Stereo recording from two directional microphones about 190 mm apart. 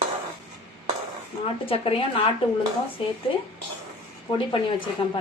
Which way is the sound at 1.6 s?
30° left (ahead or behind).